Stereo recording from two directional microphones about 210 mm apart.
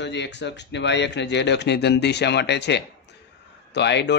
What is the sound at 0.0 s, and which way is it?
Speech, 55° left (ahead or behind).